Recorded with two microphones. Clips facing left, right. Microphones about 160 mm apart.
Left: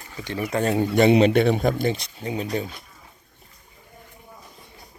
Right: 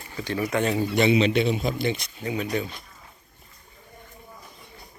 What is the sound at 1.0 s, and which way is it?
Speech, 55° left (ahead or behind).